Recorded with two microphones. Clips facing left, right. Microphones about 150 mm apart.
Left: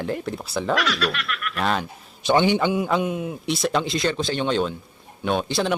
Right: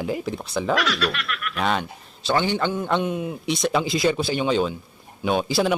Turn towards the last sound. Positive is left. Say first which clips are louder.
# right 2 dB
turn(degrees=-5)  # may be behind; listen again after turning